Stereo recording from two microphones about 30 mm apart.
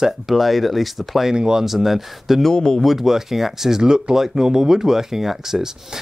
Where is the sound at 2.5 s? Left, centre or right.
Left.